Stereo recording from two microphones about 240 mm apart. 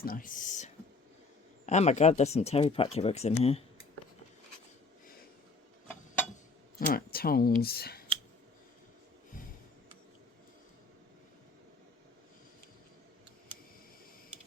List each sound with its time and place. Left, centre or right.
0.0 s speech: left
6.7 s speech: left